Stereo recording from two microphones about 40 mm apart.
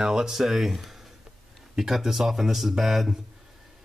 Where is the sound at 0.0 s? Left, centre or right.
Centre.